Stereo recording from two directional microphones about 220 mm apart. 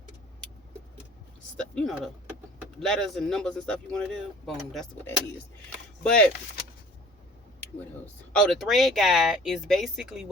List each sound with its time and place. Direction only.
1.5 s speech: 5° left (ahead or behind)
7.6 s speech: 5° left (ahead or behind)